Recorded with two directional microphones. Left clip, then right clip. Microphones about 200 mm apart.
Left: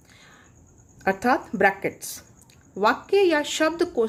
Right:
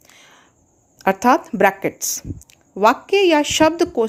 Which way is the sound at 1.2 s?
30° right (ahead or behind).